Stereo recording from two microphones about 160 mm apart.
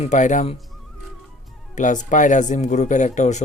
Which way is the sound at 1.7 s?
50° left (ahead or behind).